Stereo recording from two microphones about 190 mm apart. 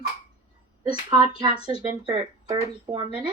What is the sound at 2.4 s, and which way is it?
Speech, 30° right (ahead or behind).